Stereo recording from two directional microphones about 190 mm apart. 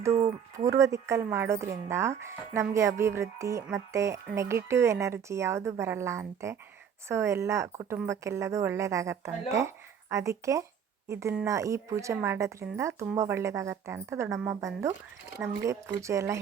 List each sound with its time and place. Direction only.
0.2 s speech: 15° right (ahead or behind)